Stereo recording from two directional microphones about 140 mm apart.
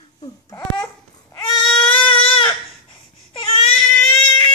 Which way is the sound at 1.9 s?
40° left (ahead or behind).